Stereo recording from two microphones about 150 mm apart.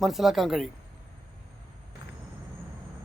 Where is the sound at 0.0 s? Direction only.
Centre (ahead or behind).